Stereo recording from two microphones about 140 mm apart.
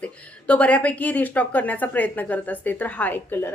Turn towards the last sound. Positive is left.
turn(degrees=15)  # may be behind; listen again after turning